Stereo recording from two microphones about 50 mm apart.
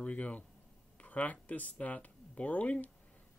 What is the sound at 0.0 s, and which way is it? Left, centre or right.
Speech, left.